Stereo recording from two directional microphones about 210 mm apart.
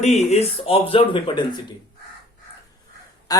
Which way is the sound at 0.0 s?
30° left (ahead or behind).